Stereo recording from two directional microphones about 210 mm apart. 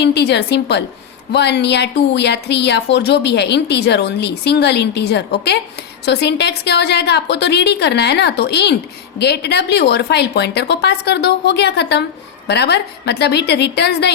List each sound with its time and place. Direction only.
0.0 s a woman's voice: 50° left (ahead or behind)